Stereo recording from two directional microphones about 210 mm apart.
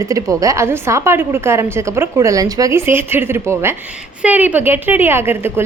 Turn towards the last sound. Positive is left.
turn(degrees=-10)  # may be behind; listen again after turning